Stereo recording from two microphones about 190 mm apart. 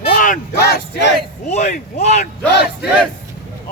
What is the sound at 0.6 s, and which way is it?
Speech, 60° left (ahead or behind).